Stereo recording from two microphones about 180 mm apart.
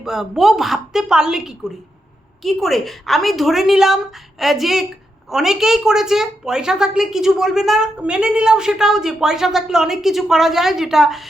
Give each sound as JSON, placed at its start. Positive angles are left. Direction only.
{"t": 0.0, "sound": "a woman's voice", "side_deg": 0}